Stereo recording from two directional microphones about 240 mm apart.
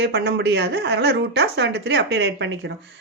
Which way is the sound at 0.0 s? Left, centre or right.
Right.